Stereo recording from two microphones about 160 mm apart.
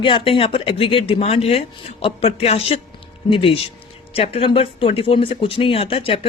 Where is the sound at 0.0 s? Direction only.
30° left (ahead or behind).